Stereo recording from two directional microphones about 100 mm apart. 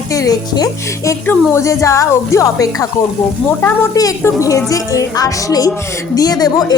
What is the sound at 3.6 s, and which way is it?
Speech, 20° left (ahead or behind).